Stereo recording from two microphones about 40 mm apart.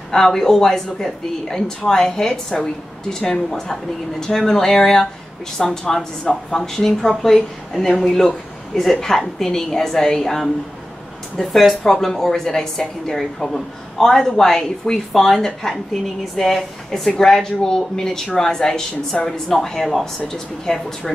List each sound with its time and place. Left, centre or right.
0.1 s speech: centre
8.9 s speech: centre
11.5 s a woman's voice: centre
20.7 s a woman's voice: centre